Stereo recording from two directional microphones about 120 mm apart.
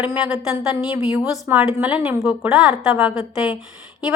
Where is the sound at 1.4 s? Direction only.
20° right (ahead or behind).